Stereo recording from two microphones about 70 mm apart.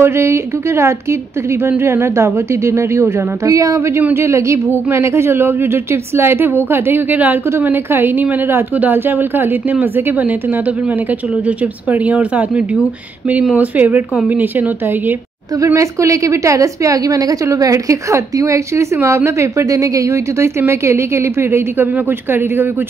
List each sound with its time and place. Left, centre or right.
0.0 s a woman's voice: right
11.4 s a woman's voice: right
15.6 s a woman's voice: right